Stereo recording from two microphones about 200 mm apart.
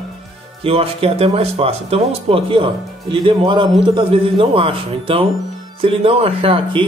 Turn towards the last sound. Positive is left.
turn(degrees=-25)  # may be behind; listen again after turning